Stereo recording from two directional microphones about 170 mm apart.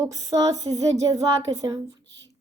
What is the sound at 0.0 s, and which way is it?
A woman's voice, 20° right (ahead or behind).